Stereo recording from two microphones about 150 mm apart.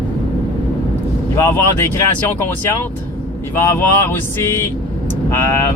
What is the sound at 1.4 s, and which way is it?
Speech, 15° left (ahead or behind).